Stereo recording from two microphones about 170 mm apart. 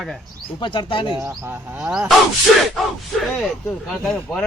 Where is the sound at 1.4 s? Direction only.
10° right (ahead or behind).